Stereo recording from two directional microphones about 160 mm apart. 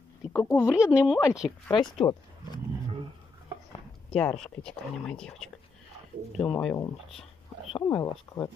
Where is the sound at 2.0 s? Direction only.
20° left (ahead or behind).